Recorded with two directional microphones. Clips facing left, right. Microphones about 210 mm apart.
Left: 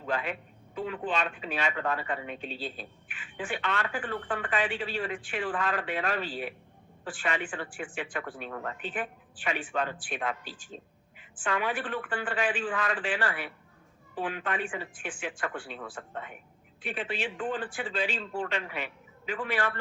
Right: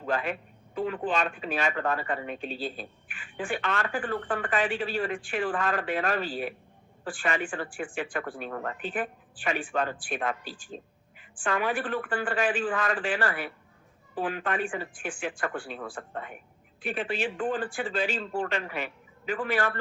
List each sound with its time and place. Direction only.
0.0 s speech: 45° right (ahead or behind)